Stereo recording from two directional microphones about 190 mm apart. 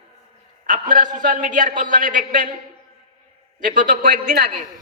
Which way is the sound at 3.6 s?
45° right (ahead or behind).